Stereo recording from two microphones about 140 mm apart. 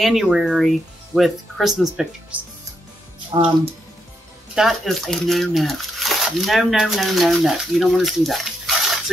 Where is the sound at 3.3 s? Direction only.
40° right (ahead or behind).